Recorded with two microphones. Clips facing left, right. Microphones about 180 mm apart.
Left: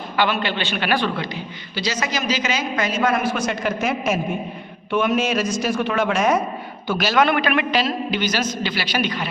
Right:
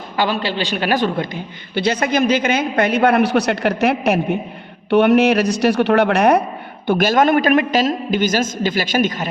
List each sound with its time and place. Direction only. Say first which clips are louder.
0.2 s a man's voice: right 2 dB; 35° right (ahead or behind); by 6.4 s 65° right (ahead or behind)
6.8 s a man's voice: right 4 dB; 50° right (ahead or behind)